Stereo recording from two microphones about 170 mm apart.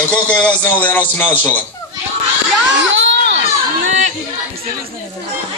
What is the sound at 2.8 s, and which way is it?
Crowd, 90° right.